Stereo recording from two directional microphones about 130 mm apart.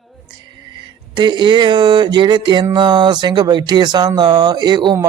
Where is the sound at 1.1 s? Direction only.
35° right (ahead or behind).